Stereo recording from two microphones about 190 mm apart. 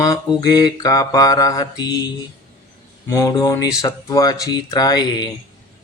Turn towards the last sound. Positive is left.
turn(degrees=20)  # may be behind; listen again after turning